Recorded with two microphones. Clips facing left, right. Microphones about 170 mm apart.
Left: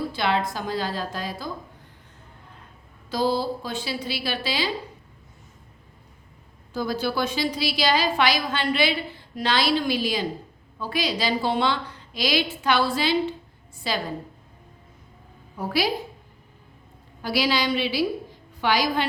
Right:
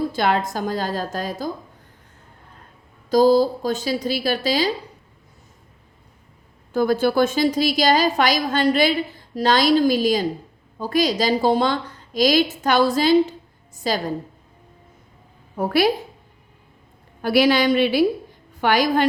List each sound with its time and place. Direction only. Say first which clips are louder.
0.1 s a woman's voice: right 4 dB; 45° right (ahead or behind)
3.1 s a woman's voice: right 9 dB; 40° right (ahead or behind)
6.7 s a woman's voice: right 8 dB; 55° right (ahead or behind)
15.5 s a woman's voice: right 7 dB; 55° right (ahead or behind)
17.2 s a woman's voice: right 7 dB; 55° right (ahead or behind)